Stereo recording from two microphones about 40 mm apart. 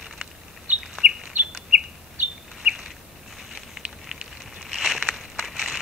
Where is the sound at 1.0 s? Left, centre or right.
Centre.